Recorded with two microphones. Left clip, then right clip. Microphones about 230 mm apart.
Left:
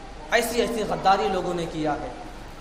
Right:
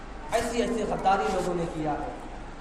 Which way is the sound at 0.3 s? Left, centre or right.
Left.